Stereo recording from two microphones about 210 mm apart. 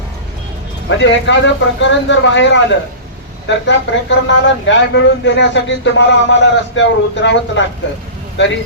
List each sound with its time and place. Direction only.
0.9 s speech: 60° left (ahead or behind)